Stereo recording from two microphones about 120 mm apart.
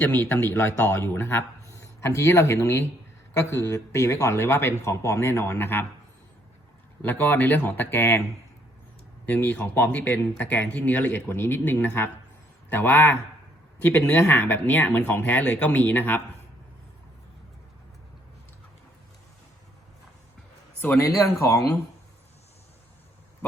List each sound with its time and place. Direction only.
0.0 s a man's voice: 15° left (ahead or behind)
7.0 s speech: 15° left (ahead or behind)
20.8 s a man's voice: 25° left (ahead or behind)